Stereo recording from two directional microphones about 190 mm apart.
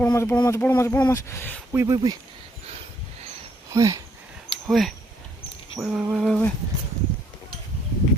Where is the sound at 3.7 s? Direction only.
15° right (ahead or behind).